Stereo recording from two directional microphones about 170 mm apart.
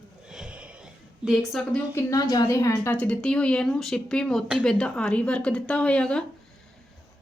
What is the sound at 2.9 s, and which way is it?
Speech, 10° left (ahead or behind).